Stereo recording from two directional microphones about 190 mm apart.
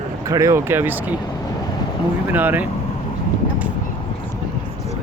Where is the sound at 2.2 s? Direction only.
10° right (ahead or behind).